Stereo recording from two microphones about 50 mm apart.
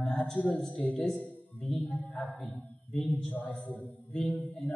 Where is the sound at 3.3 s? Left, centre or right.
Left.